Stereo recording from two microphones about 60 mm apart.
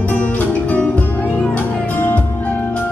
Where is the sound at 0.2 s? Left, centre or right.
Left.